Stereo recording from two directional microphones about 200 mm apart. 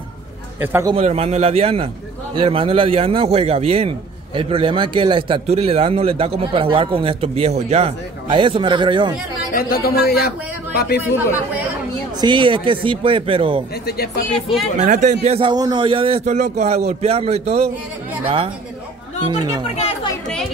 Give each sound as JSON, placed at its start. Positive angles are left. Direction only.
{"t": 0.6, "sound": "a man's voice", "side_deg": -10}
{"t": 0.9, "sound": "a man's voice", "side_deg": -30}
{"t": 9.5, "sound": "speech", "side_deg": 50}
{"t": 12.2, "sound": "a man's voice", "side_deg": -25}
{"t": 13.8, "sound": "speech", "side_deg": 50}
{"t": 14.8, "sound": "a man's voice", "side_deg": -40}
{"t": 15.2, "sound": "a man's voice", "side_deg": -25}
{"t": 19.7, "sound": "speech", "side_deg": 35}